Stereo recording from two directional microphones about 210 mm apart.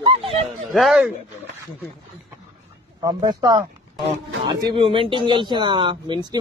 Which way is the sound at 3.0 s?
15° right (ahead or behind).